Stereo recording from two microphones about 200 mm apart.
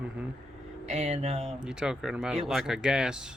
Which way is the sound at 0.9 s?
30° right (ahead or behind).